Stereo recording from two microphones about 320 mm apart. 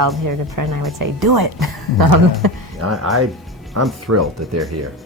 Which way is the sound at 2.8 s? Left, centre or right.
Right.